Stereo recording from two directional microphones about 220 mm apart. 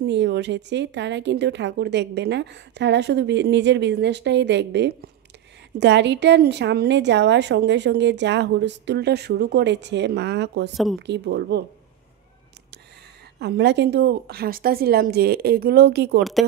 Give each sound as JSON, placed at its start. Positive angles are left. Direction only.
{"t": 0.0, "sound": "speech", "side_deg": -50}
{"t": 13.4, "sound": "speech", "side_deg": -50}
{"t": 16.2, "sound": "speech", "side_deg": 0}